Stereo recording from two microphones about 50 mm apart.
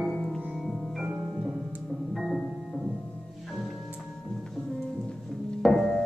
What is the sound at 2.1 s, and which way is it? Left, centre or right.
Music, centre.